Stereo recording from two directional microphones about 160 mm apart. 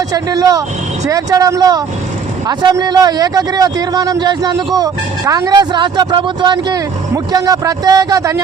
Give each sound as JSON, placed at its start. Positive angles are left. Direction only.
{"t": 0.1, "sound": "a man's voice", "side_deg": -25}